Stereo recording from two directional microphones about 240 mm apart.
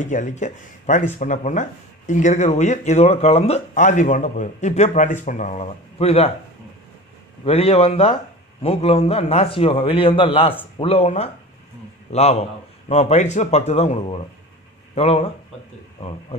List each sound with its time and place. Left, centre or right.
0.0 s speech: left
7.4 s speech: left